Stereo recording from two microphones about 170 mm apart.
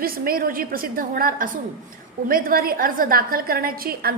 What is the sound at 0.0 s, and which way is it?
A woman's voice, 60° right (ahead or behind).